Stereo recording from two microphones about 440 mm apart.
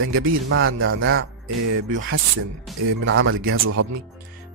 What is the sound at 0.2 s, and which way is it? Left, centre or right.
Speech, right.